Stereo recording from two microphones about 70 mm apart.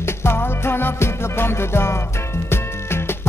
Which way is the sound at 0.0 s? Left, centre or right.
Left.